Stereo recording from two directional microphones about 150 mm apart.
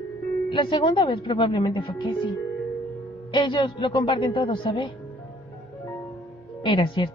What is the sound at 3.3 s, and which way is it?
Speech, 30° left (ahead or behind).